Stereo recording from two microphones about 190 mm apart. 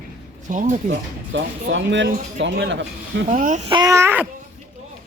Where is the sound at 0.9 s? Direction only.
75° right (ahead or behind).